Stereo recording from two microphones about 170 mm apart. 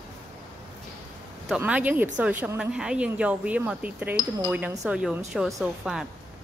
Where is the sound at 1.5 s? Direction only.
10° right (ahead or behind).